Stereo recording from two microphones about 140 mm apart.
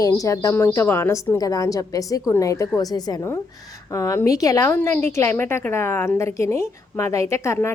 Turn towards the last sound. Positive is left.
turn(degrees=20)  # may be behind; listen again after turning